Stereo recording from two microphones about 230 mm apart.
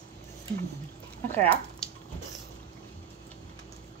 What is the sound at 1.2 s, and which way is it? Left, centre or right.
Speech, centre.